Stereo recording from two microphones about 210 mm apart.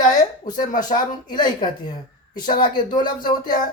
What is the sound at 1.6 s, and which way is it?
A woman's voice, 20° left (ahead or behind).